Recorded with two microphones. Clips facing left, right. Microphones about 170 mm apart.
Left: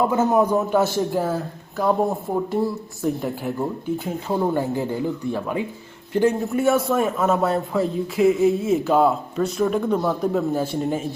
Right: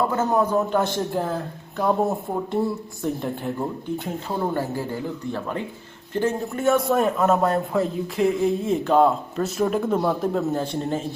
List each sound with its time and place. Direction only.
0.0 s a man's voice: 10° left (ahead or behind)
5.3 s a man's voice: 10° left (ahead or behind)